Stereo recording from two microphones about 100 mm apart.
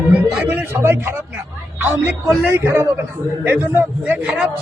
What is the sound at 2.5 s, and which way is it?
A man's voice, 25° right (ahead or behind).